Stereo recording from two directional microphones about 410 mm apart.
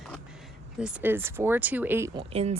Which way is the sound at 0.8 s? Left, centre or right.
Centre.